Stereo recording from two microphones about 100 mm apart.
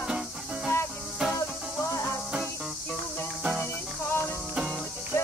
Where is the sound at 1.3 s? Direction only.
30° left (ahead or behind).